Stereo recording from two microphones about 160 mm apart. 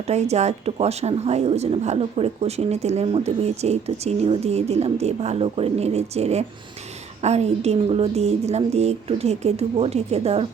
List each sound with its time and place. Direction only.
0.1 s speech: 45° right (ahead or behind)